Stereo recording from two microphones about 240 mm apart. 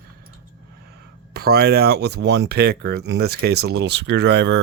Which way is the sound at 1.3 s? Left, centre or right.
Right.